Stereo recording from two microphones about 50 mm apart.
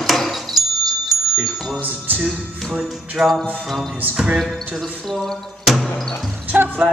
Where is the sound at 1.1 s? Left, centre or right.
Centre.